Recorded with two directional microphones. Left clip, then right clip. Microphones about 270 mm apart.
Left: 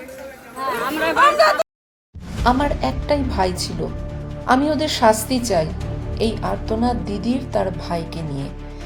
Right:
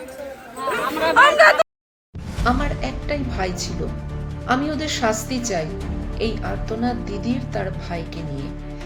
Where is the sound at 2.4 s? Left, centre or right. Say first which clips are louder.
Left 4 dB; centre.